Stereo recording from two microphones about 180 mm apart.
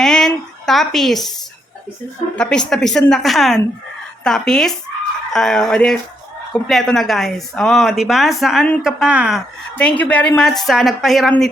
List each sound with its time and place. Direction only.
0.0 s a sound: 5° left (ahead or behind)
2.3 s speech: 5° left (ahead or behind)
9.7 s speech: 10° left (ahead or behind)